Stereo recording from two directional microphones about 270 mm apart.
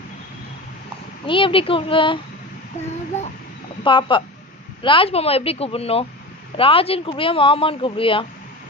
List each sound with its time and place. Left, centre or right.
1.3 s speech: centre
3.8 s speech: centre